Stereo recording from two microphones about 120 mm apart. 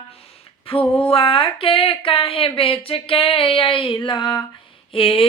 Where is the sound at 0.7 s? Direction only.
50° left (ahead or behind).